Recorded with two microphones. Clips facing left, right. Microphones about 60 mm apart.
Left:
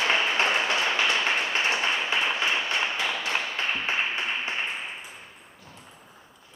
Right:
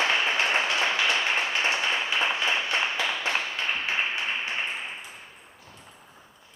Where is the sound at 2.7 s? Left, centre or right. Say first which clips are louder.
Even; right.